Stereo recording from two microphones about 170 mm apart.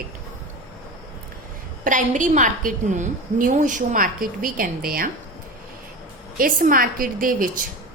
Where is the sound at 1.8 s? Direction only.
50° right (ahead or behind).